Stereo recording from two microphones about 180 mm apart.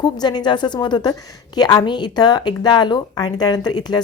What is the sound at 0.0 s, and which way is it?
Speech, 25° left (ahead or behind).